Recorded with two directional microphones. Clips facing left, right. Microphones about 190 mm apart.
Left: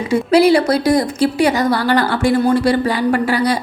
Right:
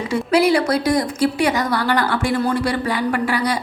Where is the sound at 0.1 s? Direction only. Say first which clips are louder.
Left 5 dB; 30° left (ahead or behind).